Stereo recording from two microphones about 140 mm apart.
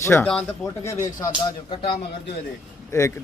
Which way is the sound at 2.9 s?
20° left (ahead or behind).